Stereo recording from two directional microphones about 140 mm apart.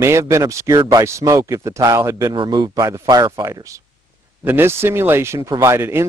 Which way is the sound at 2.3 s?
35° right (ahead or behind).